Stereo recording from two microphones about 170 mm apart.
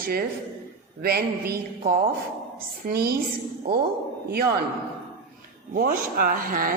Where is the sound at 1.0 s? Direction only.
65° right (ahead or behind).